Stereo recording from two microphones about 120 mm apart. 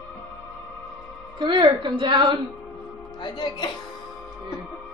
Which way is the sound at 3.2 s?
40° left (ahead or behind).